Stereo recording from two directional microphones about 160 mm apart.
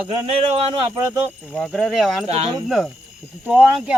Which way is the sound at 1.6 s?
5° left (ahead or behind).